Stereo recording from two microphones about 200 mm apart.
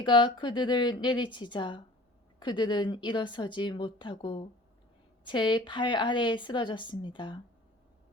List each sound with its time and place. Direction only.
0.0 s a woman's voice: 25° left (ahead or behind)